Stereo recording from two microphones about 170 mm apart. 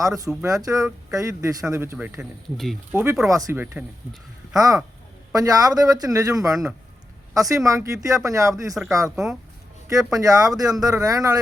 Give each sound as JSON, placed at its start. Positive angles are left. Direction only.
{"t": 0.4, "sound": "speech", "side_deg": -20}
{"t": 8.7, "sound": "speech", "side_deg": 0}
{"t": 9.9, "sound": "speech", "side_deg": -20}